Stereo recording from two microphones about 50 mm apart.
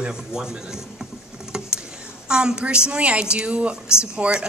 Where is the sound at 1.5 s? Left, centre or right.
Right.